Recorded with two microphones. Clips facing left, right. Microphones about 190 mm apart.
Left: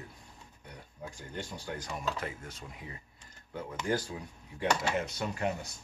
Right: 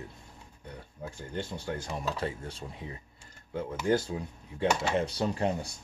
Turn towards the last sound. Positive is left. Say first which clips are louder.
# right 4 dB
turn(degrees=-30)  # may be behind; listen again after turning